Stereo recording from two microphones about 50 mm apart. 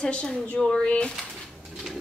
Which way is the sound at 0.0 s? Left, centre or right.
Centre.